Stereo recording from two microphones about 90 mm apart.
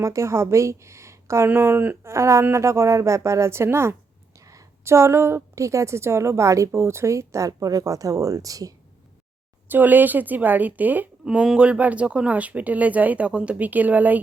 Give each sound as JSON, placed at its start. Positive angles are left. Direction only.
{"t": 0.0, "sound": "a woman's voice", "side_deg": -35}
{"t": 2.1, "sound": "a woman's voice", "side_deg": -30}
{"t": 9.6, "sound": "a woman's voice", "side_deg": -20}